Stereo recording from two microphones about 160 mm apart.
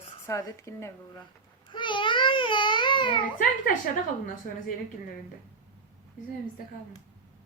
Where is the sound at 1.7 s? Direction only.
30° left (ahead or behind).